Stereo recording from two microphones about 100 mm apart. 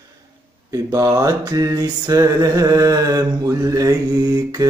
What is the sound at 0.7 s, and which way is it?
Mantra, 35° right (ahead or behind).